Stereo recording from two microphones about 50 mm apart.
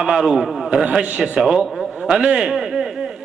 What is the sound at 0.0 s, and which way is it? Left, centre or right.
Speech, centre.